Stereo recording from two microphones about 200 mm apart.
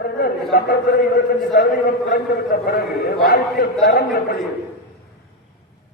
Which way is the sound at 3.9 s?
50° left (ahead or behind).